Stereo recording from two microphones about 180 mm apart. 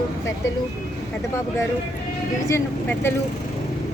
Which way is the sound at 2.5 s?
15° left (ahead or behind).